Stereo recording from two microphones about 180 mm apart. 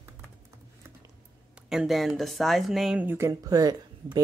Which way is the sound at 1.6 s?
Centre (ahead or behind).